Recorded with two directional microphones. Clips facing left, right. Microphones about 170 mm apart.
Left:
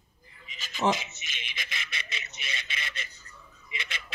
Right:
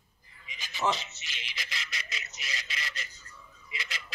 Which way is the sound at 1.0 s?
20° left (ahead or behind).